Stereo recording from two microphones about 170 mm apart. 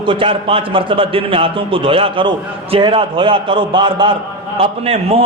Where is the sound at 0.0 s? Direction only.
30° right (ahead or behind).